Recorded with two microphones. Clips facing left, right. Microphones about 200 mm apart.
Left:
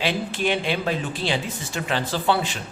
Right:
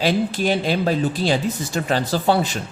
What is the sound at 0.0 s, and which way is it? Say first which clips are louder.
Speech: right 5 dB; 40° right (ahead or behind).